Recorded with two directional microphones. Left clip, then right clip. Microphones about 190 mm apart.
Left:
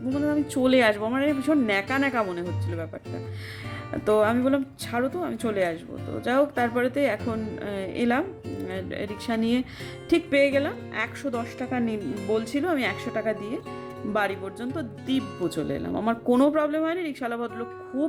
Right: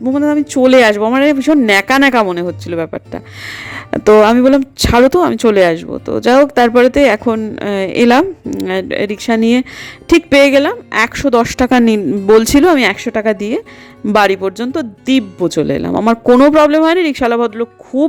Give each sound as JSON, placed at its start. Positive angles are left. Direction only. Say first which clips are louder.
{"t": 0.1, "sound": "speech", "louder": "right 12 dB", "side_deg": -40}
{"t": 16.5, "sound": "speech", "louder": "right 16 dB", "side_deg": -50}